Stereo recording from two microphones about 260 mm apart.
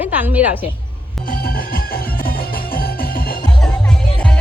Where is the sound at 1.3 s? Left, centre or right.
Left.